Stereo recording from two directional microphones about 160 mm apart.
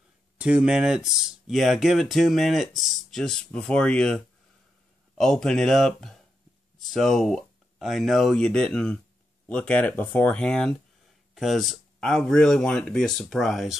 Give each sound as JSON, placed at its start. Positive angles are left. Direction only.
{"t": 0.4, "sound": "speech", "side_deg": -5}